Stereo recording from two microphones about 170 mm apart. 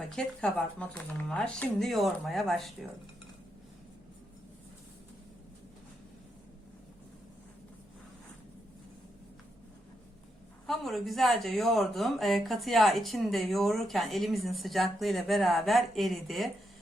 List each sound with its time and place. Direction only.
0.0 s speech: 5° left (ahead or behind)
10.7 s speech: centre (ahead or behind)